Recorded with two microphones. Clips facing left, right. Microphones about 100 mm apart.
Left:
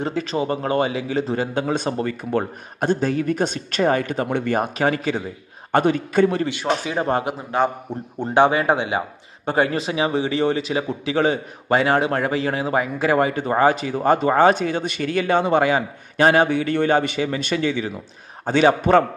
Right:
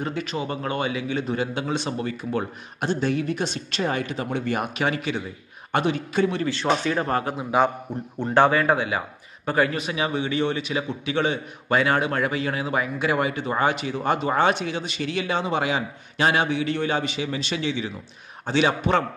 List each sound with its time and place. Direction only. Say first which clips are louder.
0.0 s a man's voice: left 5 dB; 35° left (ahead or behind); by 4.6 s 50° left (ahead or behind)
4.6 s a man's voice: left 5 dB; 40° left (ahead or behind)
6.5 s speech: even; 10° left (ahead or behind)
7.0 s speech: left 3 dB; 20° left (ahead or behind)
7.3 s a man's voice: even; 5° right (ahead or behind)
8.2 s a man's voice: left 2 dB; 15° left (ahead or behind); by 19.0 s 45° left (ahead or behind)